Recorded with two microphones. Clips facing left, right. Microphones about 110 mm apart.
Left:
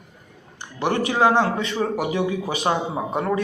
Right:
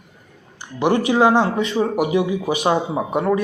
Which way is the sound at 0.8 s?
15° right (ahead or behind).